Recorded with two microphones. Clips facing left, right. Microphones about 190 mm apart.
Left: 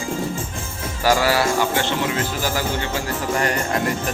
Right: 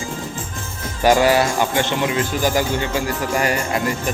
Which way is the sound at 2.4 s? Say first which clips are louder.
Right 4 dB; 15° right (ahead or behind).